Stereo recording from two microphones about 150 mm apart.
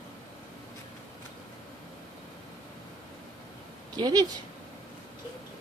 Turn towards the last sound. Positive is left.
turn(degrees=-25)  # may be behind; listen again after turning